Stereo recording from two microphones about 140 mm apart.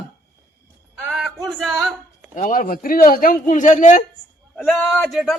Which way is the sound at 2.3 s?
75° left (ahead or behind).